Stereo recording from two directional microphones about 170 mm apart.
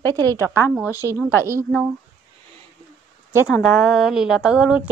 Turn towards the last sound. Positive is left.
turn(degrees=-5)  # may be behind; listen again after turning